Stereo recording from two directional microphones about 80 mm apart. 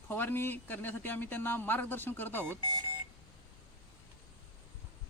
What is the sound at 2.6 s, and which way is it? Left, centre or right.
Speech, right.